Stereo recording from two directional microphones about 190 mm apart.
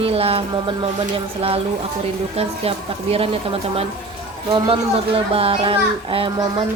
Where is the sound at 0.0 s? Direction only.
30° right (ahead or behind).